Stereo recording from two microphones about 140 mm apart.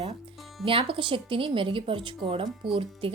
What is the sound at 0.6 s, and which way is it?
A woman's voice, 40° right (ahead or behind).